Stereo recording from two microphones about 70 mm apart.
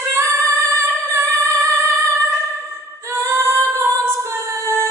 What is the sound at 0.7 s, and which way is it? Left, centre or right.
Singing, right.